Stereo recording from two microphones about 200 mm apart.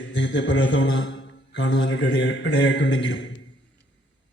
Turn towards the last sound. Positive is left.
turn(degrees=60)  # may be behind; listen again after turning